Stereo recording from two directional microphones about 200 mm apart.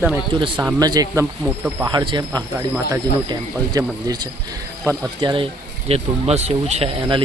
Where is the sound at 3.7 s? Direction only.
20° right (ahead or behind).